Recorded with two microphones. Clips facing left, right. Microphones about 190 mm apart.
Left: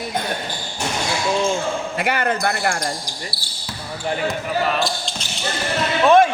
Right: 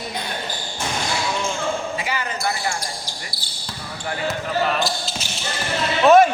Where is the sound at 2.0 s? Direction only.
60° left (ahead or behind).